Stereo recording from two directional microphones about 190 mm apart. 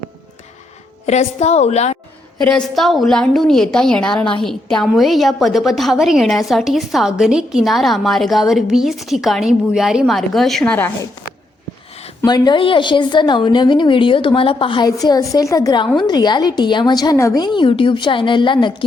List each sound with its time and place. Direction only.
1.0 s a woman's voice: 35° left (ahead or behind)
2.4 s a woman's voice: 5° left (ahead or behind)
12.2 s a woman's voice: 20° left (ahead or behind)